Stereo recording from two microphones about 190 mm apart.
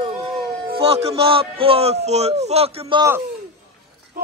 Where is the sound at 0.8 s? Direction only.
30° right (ahead or behind).